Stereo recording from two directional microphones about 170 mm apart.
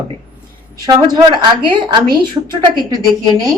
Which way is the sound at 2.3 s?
25° right (ahead or behind).